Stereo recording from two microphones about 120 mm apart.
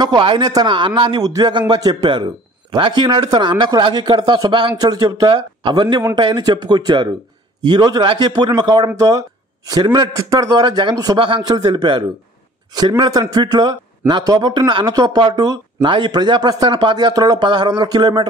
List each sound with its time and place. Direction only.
0.0 s speech: 40° right (ahead or behind)